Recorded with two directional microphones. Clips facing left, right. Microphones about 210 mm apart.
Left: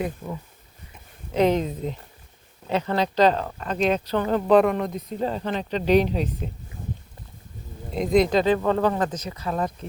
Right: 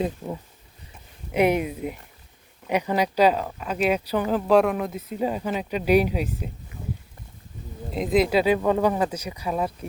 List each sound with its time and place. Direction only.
0.2 s speech: 15° right (ahead or behind)
7.9 s speech: 5° right (ahead or behind)